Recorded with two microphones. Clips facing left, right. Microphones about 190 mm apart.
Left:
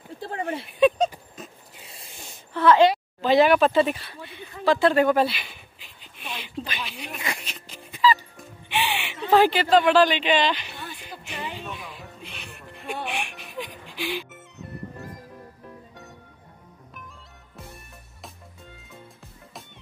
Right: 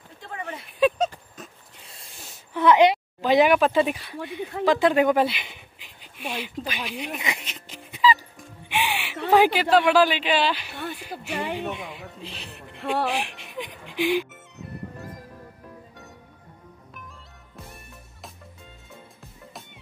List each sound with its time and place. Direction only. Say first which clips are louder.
0.2 s a sound: left 6 dB; 35° left (ahead or behind)
0.7 s a sound: left 2 dB; 5° right (ahead or behind)
2.5 s speech: even; 15° right (ahead or behind)
4.4 s speech: right 11 dB; 70° right (ahead or behind)
4.6 s speech: even; 15° right (ahead or behind)
8.6 s music: even; 10° right (ahead or behind)
9.3 s a woman's voice: even; 10° right (ahead or behind)
10.7 s a sound: right 5 dB; 55° right (ahead or behind)
11.3 s speech: right 6 dB; 60° right (ahead or behind)
11.8 s speech: right 3 dB; 20° right (ahead or behind)
13.0 s speech: right 5 dB; 35° right (ahead or behind); by 14.2 s 15° right (ahead or behind)
14.3 s music: even; centre (ahead or behind)